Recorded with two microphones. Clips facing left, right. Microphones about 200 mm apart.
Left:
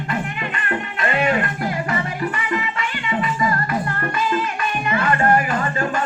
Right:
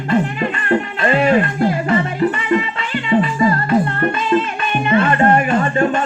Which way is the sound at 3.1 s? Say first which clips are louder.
Right 7 dB; 30° right (ahead or behind).